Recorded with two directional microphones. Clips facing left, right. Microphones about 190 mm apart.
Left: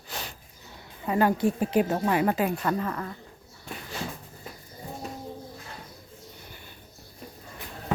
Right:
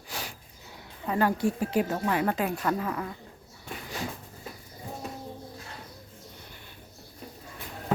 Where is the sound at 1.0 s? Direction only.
15° left (ahead or behind); by 3.2 s 5° right (ahead or behind).